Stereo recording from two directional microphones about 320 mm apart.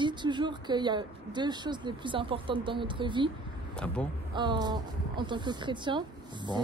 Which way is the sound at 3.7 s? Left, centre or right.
Centre.